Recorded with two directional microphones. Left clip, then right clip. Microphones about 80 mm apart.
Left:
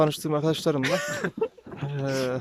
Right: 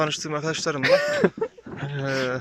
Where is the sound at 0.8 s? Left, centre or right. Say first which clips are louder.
Right 8 dB; right.